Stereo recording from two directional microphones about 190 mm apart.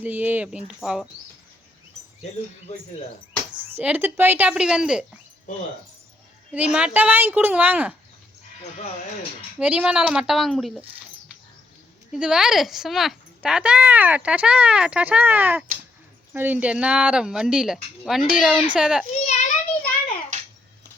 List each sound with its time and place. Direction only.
0.0 s speech: 10° right (ahead or behind)
3.6 s speech: 10° right (ahead or behind)
6.5 s speech: 5° right (ahead or behind)
9.6 s speech: 5° right (ahead or behind)
12.1 s speech: 5° right (ahead or behind)
19.2 s a child's voice: 40° left (ahead or behind)
20.3 s a sound: 40° right (ahead or behind)